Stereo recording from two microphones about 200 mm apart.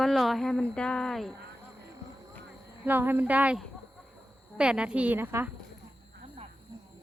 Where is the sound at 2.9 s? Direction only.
10° right (ahead or behind).